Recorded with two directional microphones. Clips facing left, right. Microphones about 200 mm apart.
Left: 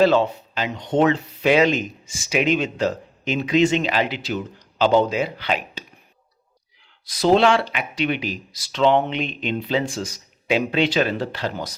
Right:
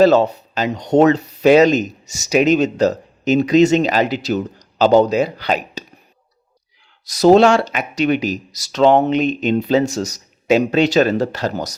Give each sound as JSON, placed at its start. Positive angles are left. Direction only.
{"t": 0.0, "sound": "speech", "side_deg": -40}
{"t": 7.0, "sound": "speech", "side_deg": -40}